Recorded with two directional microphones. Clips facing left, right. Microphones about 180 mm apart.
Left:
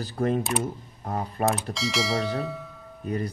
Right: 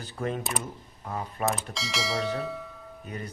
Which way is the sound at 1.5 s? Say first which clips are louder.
Left 5 dB; centre (ahead or behind).